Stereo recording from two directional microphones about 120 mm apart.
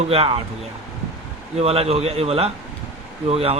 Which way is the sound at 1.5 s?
55° right (ahead or behind).